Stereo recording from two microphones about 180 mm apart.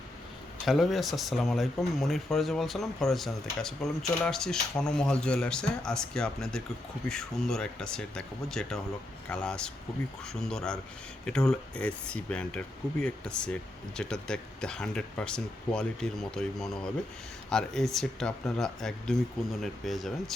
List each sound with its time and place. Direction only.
0.6 s speech: centre (ahead or behind)